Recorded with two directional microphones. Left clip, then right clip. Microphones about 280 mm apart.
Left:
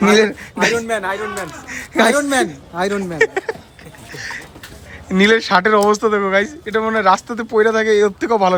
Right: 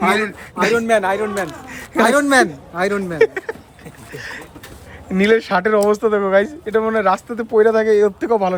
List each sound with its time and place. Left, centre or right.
0.2 s speech: centre
0.8 s speech: right
1.9 s speech: centre
4.1 s a sound: centre
5.0 s speech: centre